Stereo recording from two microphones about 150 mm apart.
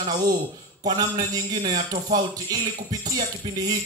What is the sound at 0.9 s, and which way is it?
A man's voice, 25° right (ahead or behind).